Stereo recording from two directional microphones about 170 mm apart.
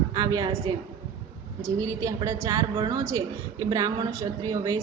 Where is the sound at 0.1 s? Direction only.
20° right (ahead or behind).